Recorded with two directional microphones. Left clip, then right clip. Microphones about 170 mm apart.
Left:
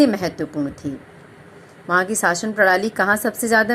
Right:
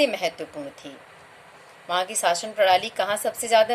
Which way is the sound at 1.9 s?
20° left (ahead or behind).